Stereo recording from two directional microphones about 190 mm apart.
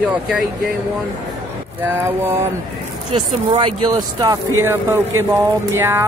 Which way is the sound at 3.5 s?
25° right (ahead or behind).